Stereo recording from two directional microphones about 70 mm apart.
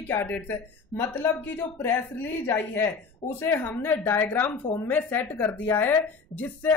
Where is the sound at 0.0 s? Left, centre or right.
Left.